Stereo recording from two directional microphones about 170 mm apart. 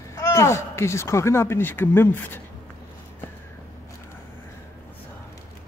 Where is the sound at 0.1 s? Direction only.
20° left (ahead or behind).